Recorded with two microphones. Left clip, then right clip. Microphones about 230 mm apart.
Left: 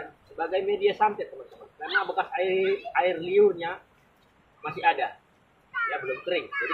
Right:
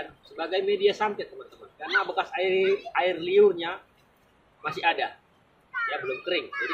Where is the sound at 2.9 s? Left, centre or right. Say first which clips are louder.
Left 2 dB; centre.